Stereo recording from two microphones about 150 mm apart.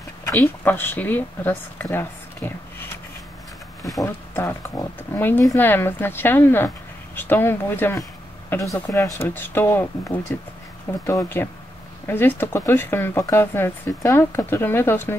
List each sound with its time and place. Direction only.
0.4 s speech: 15° left (ahead or behind)
4.0 s speech: 20° left (ahead or behind)